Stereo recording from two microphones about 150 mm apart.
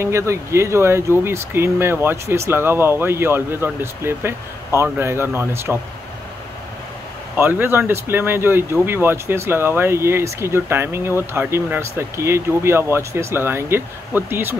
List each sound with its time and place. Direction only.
0.0 s speech: 20° right (ahead or behind)
7.3 s speech: 15° right (ahead or behind)